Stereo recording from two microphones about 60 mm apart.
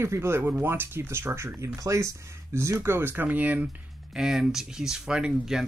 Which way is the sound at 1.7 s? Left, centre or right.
Right.